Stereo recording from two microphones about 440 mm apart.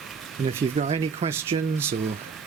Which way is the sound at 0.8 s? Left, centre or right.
Centre.